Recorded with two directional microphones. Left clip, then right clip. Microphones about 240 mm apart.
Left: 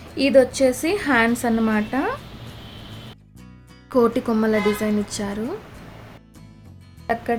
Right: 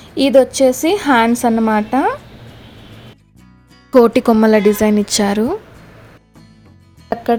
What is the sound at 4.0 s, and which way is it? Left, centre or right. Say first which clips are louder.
A woman's voice: right 9 dB; right.